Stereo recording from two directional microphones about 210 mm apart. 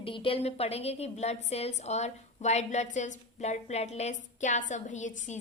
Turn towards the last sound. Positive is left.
turn(degrees=35)  # may be behind; listen again after turning